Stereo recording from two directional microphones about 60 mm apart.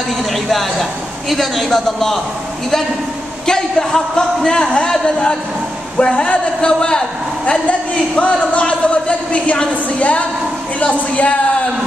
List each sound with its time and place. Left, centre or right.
0.2 s a man's voice: centre
3.4 s speech: centre